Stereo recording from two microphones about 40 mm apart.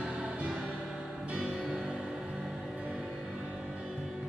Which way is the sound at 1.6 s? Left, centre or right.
Centre.